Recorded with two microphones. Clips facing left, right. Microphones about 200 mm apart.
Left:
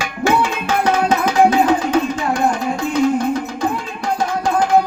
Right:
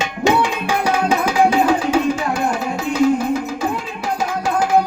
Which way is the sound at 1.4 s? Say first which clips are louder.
Left 1 dB; 10° right (ahead or behind).